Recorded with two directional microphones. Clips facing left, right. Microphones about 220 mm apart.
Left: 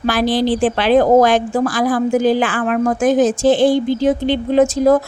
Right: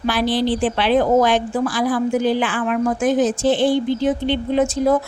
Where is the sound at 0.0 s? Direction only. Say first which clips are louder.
Left 3 dB; 45° left (ahead or behind).